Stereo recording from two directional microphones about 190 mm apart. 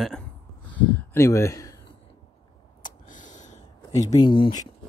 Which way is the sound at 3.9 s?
25° left (ahead or behind).